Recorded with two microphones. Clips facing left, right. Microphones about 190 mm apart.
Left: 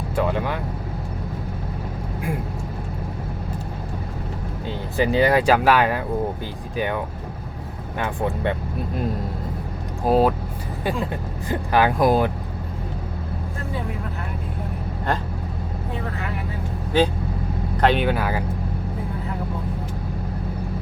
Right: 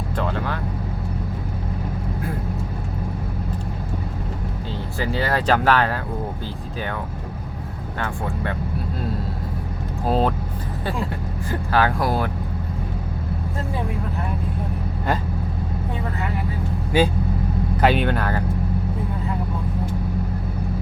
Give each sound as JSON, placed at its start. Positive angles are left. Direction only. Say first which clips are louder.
{"t": 0.2, "sound": "vehicle", "louder": "left 4 dB", "side_deg": 15}
{"t": 4.9, "sound": "speech", "louder": "left 6 dB", "side_deg": 15}
{"t": 10.1, "sound": "speech", "louder": "left 3 dB", "side_deg": 10}
{"t": 11.4, "sound": "speech", "louder": "left 1 dB", "side_deg": 15}
{"t": 16.9, "sound": "speech", "louder": "even", "side_deg": -10}